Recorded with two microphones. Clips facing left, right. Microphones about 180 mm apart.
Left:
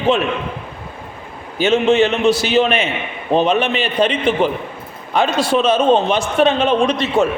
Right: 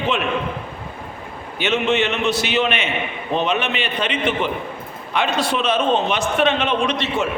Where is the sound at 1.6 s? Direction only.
35° left (ahead or behind).